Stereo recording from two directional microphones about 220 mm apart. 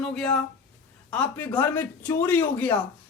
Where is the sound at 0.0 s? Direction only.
Centre (ahead or behind).